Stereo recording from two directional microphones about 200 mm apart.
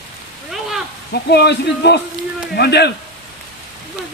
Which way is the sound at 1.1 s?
55° left (ahead or behind).